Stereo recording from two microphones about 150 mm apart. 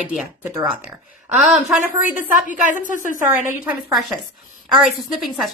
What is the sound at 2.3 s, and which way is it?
Speech, 60° left (ahead or behind).